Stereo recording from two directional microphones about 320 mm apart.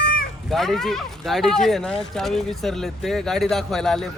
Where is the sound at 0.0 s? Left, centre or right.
Left.